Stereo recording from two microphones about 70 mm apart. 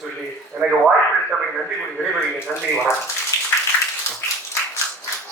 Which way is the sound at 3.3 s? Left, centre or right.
Left.